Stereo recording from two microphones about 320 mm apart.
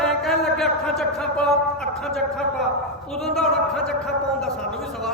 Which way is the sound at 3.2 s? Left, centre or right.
Centre.